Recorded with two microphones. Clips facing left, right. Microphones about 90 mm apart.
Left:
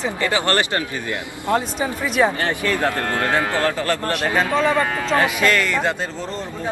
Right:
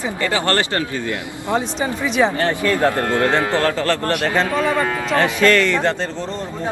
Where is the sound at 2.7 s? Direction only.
20° right (ahead or behind).